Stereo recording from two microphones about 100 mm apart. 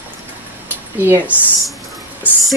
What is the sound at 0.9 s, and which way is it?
Speech, 25° right (ahead or behind).